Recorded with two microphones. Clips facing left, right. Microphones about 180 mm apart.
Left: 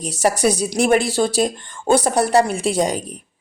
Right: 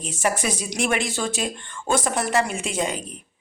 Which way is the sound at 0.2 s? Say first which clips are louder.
Left 7 dB; 35° left (ahead or behind).